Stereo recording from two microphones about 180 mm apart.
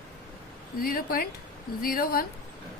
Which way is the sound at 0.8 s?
55° left (ahead or behind).